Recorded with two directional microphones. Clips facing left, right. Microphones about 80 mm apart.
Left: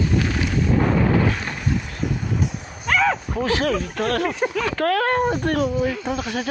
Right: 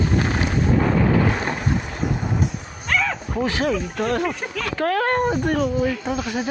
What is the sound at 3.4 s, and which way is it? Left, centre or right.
Speech, centre.